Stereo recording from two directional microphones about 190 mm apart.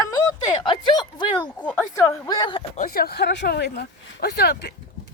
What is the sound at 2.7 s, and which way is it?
Speech, 50° left (ahead or behind).